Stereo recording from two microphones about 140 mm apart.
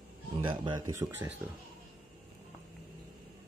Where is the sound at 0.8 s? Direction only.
20° right (ahead or behind).